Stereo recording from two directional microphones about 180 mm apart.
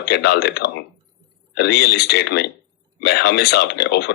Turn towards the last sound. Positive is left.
turn(degrees=65)  # may be behind; listen again after turning